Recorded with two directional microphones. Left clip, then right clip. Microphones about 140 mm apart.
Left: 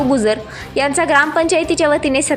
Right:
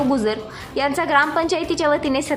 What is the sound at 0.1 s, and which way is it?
A woman's voice, 25° left (ahead or behind).